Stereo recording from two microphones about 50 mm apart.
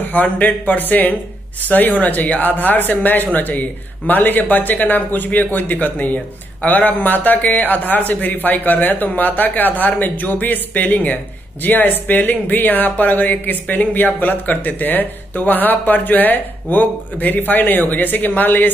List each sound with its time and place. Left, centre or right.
0.0 s a man's voice: left